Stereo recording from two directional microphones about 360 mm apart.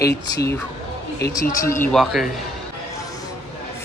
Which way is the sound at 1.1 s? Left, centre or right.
Left.